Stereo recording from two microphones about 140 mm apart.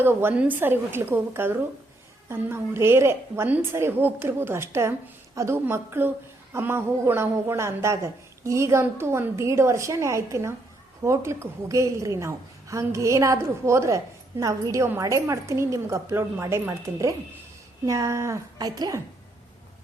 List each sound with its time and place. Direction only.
0.0 s a woman's voice: 15° right (ahead or behind)